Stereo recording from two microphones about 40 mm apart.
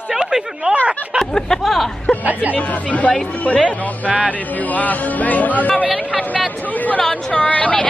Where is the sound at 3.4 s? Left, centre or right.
Left.